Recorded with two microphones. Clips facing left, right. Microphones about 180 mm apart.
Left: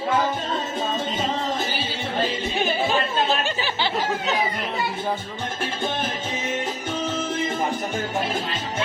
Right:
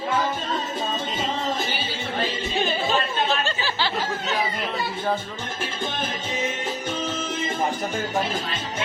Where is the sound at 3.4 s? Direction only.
15° left (ahead or behind).